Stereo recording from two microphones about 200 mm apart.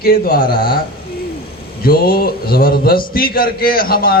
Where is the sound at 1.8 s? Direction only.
50° left (ahead or behind).